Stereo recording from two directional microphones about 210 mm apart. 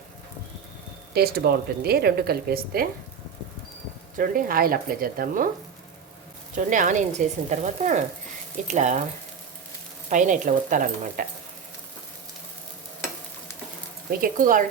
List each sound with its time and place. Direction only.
1.1 s speech: 50° right (ahead or behind)
4.2 s speech: 45° right (ahead or behind)
6.6 s speech: 35° right (ahead or behind)
10.1 s speech: 35° right (ahead or behind)
14.1 s speech: 40° right (ahead or behind)